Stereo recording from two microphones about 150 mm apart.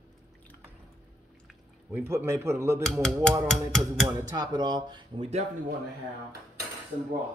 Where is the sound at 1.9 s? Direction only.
15° right (ahead or behind).